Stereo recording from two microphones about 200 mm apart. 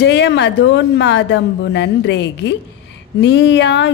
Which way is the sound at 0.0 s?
60° left (ahead or behind).